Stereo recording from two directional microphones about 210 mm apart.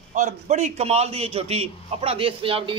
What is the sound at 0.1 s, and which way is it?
A man's voice, 35° right (ahead or behind).